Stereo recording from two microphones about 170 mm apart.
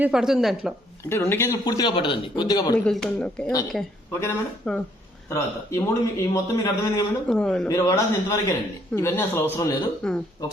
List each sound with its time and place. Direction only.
0.0 s a woman's voice: 5° right (ahead or behind)
1.1 s a man's voice: 15° left (ahead or behind)
1.6 s speech: 25° left (ahead or behind)
2.7 s a woman's voice: 5° left (ahead or behind)
3.4 s a man's voice: 20° left (ahead or behind)
4.7 s a woman's voice: 5° left (ahead or behind)
5.3 s a man's voice: 15° left (ahead or behind)
7.3 s a woman's voice: 5° left (ahead or behind)
7.7 s a man's voice: 20° left (ahead or behind)
10.0 s a woman's voice: 5° left (ahead or behind)